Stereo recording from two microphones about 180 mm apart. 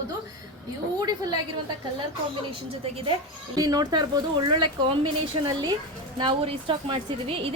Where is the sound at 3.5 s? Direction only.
20° right (ahead or behind).